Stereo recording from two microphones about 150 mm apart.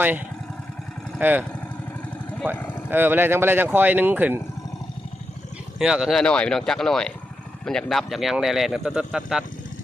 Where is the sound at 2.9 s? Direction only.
15° right (ahead or behind).